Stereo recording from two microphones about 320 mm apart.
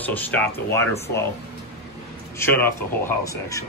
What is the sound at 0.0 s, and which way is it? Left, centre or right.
Speech, centre.